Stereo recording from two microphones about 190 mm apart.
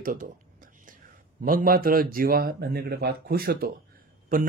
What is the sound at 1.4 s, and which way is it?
A man's voice, 45° right (ahead or behind).